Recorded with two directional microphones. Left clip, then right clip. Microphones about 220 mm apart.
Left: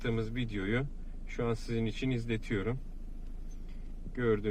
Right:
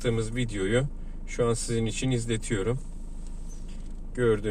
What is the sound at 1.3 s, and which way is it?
Speech, 35° left (ahead or behind).